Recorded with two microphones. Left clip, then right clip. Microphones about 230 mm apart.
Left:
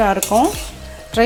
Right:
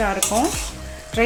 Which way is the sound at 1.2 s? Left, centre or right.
Left.